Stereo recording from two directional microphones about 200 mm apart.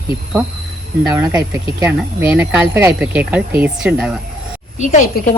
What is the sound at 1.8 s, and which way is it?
Speech, 5° right (ahead or behind).